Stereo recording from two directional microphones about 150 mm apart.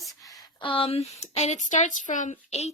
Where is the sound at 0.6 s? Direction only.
35° left (ahead or behind).